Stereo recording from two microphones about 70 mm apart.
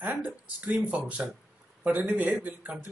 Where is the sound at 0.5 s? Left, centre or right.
Right.